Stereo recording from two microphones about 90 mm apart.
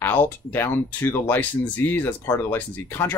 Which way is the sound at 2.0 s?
30° left (ahead or behind).